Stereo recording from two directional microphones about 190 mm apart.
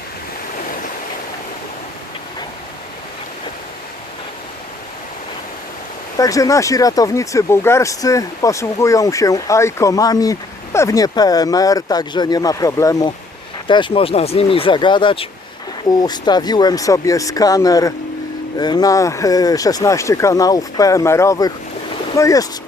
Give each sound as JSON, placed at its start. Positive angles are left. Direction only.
{"t": 6.1, "sound": "speech", "side_deg": 20}